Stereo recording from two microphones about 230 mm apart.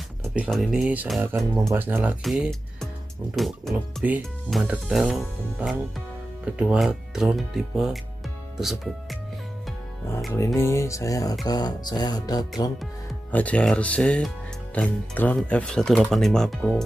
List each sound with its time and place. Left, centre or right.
0.2 s speech: centre
10.3 s speech: centre
13.3 s speech: centre